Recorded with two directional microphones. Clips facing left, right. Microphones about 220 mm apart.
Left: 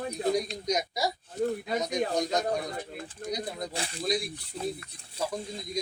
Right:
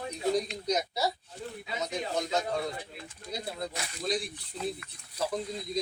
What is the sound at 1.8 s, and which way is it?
Speech, 15° left (ahead or behind).